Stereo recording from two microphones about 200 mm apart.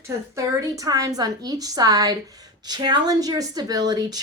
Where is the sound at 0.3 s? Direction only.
15° right (ahead or behind).